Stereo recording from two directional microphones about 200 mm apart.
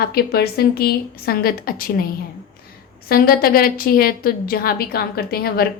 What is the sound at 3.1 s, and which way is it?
A woman's voice, 50° left (ahead or behind).